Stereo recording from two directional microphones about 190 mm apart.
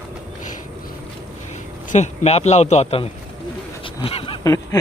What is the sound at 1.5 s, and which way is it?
A man's voice, 40° left (ahead or behind).